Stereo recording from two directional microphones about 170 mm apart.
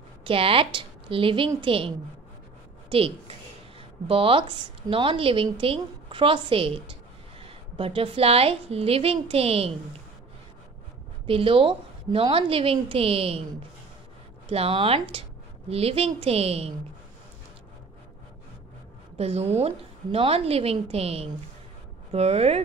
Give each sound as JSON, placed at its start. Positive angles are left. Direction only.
{"t": 0.2, "sound": "a woman's voice", "side_deg": -30}
{"t": 4.1, "sound": "a woman's voice", "side_deg": -30}
{"t": 11.2, "sound": "a woman's voice", "side_deg": -30}
{"t": 14.5, "sound": "a woman's voice", "side_deg": -35}
{"t": 19.1, "sound": "a woman's voice", "side_deg": -40}